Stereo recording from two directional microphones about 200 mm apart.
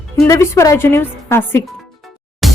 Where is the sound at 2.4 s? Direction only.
Centre (ahead or behind).